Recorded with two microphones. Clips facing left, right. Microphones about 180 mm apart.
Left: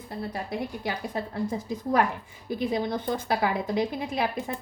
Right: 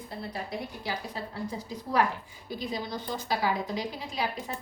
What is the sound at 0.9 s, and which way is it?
Speech, 55° left (ahead or behind).